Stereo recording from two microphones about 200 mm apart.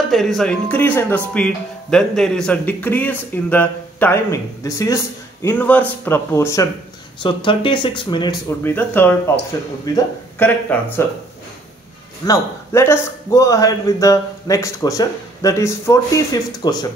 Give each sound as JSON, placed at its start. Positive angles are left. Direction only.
{"t": 0.1, "sound": "speech", "side_deg": 0}
{"t": 7.2, "sound": "speech", "side_deg": 25}
{"t": 8.5, "sound": "speech", "side_deg": 10}
{"t": 12.3, "sound": "speech", "side_deg": 15}